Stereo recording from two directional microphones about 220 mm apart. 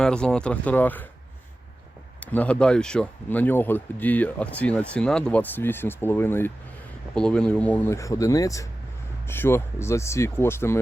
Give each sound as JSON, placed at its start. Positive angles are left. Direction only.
{"t": 0.0, "sound": "speech", "side_deg": 5}
{"t": 2.2, "sound": "speech", "side_deg": 5}